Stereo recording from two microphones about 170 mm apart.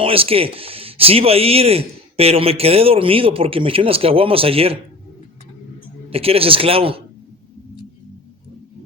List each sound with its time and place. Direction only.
0.0 s speech: 35° right (ahead or behind)
6.1 s speech: 35° right (ahead or behind)